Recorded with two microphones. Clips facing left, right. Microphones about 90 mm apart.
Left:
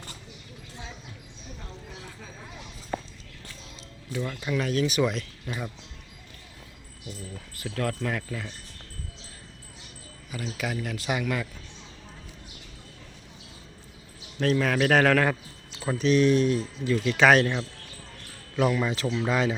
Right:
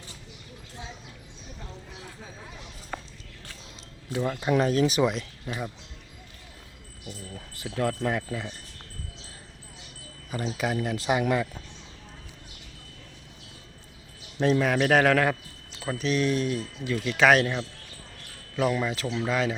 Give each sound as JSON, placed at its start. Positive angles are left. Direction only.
{"t": 4.1, "sound": "speech", "side_deg": -20}
{"t": 4.4, "sound": "speech", "side_deg": -35}
{"t": 5.5, "sound": "speech", "side_deg": -5}
{"t": 7.5, "sound": "a man's voice", "side_deg": -20}
{"t": 10.3, "sound": "speech", "side_deg": -30}
{"t": 14.3, "sound": "speech", "side_deg": -20}
{"t": 14.8, "sound": "a man's voice", "side_deg": -5}
{"t": 18.8, "sound": "speech", "side_deg": 0}